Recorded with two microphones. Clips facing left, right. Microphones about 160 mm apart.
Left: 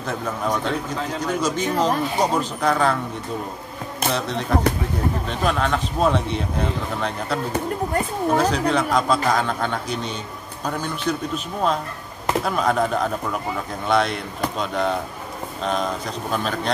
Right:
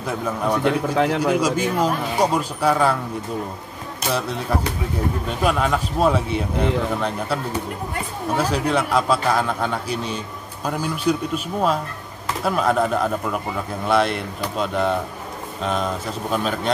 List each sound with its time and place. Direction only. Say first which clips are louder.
0.0 s speech: right 2 dB; 10° right (ahead or behind)
0.9 s a man's voice: right 8 dB; 70° right (ahead or behind)
1.4 s speech: right 1 dB; 10° right (ahead or behind)
4.1 s speech: even; 5° right (ahead or behind)
8.4 s speech: right 2 dB; 5° right (ahead or behind)